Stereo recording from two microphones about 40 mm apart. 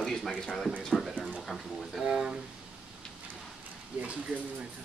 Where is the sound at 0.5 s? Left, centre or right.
Centre.